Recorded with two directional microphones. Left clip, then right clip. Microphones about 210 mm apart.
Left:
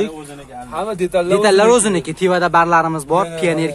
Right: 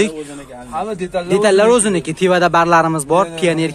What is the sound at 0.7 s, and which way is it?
Speech, 45° left (ahead or behind).